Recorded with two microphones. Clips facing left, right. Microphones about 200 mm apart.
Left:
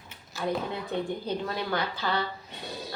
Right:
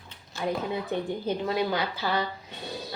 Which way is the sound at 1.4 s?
15° right (ahead or behind).